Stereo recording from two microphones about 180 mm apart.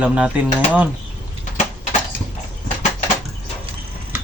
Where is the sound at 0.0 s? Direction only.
5° right (ahead or behind).